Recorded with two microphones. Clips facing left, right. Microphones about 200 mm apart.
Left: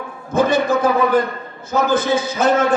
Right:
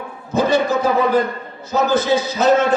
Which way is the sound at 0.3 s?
50° left (ahead or behind).